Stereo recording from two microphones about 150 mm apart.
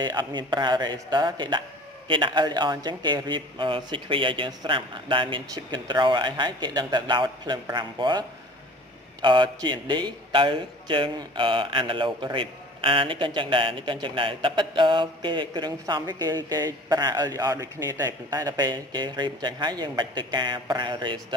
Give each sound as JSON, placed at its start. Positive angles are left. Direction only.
{"t": 0.0, "sound": "a man's voice", "side_deg": -30}